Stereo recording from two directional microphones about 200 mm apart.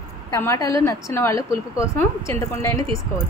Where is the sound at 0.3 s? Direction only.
15° left (ahead or behind).